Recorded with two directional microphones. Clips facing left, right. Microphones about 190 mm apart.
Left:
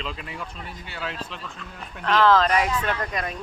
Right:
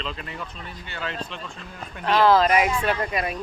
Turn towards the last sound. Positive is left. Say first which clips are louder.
# right 3 dB
turn(degrees=-10)  # may be behind; listen again after turning